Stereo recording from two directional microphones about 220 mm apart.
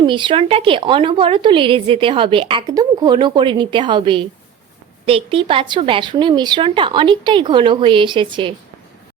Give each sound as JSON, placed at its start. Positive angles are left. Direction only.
{"t": 0.0, "sound": "a woman's voice", "side_deg": -20}